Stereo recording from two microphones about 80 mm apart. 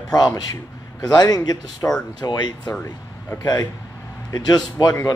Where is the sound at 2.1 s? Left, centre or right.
Left.